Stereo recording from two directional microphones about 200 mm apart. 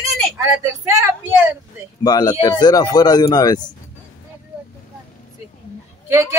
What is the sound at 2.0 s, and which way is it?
Speech, 20° left (ahead or behind).